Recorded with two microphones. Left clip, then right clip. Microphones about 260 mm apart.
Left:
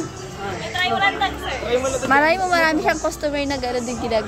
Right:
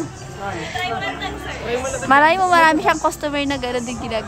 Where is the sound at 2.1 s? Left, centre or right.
Centre.